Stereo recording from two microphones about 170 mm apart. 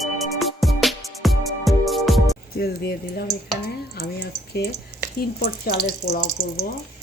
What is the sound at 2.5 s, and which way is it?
Speech, 70° left (ahead or behind).